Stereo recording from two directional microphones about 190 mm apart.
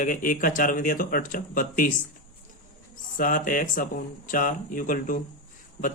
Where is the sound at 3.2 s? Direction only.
45° left (ahead or behind).